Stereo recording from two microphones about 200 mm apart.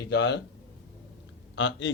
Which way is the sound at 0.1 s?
60° left (ahead or behind).